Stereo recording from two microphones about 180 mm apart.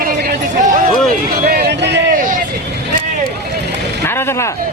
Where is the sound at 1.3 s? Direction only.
55° right (ahead or behind).